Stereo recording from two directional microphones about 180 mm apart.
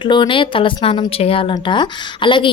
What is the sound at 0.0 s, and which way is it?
Speech, 25° left (ahead or behind).